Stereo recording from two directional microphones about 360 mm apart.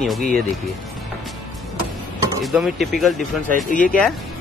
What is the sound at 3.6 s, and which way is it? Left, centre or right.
Speech, left.